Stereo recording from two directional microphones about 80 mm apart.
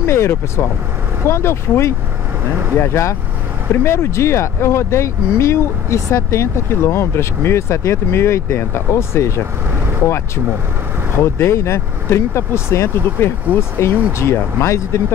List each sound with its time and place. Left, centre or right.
0.0 s speech: left